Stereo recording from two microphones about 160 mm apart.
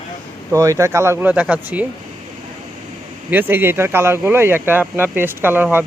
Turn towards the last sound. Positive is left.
turn(degrees=-10)  # may be behind; listen again after turning